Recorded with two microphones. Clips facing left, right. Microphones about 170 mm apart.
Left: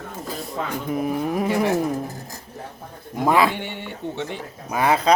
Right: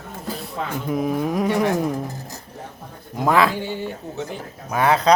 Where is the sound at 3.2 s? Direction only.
10° left (ahead or behind).